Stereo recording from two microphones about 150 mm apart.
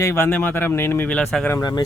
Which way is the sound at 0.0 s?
15° left (ahead or behind).